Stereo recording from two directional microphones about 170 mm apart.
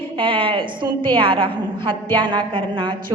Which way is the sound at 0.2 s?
30° right (ahead or behind).